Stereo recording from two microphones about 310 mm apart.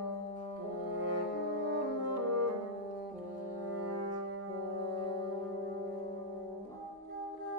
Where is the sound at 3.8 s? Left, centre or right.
Right.